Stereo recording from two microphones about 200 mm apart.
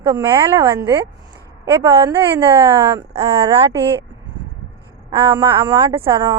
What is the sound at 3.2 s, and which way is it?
Speech, 15° right (ahead or behind).